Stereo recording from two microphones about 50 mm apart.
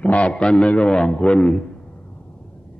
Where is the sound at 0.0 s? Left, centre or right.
Left.